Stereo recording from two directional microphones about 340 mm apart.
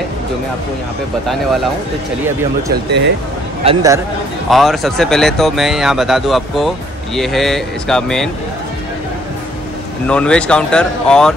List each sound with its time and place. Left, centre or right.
1.2 s speech: centre
2.7 s speech: right
3.6 s a man's voice: centre
10.0 s speech: centre